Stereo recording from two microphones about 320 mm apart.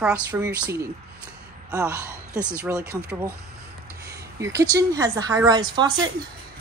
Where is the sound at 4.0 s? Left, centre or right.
Right.